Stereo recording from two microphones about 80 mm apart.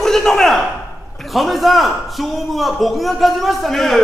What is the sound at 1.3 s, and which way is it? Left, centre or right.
A man's voice, centre.